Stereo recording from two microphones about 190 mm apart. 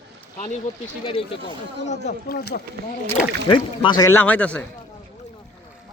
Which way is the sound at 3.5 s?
20° left (ahead or behind).